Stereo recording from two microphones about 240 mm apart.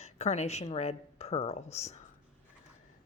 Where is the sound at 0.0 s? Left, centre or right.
Left.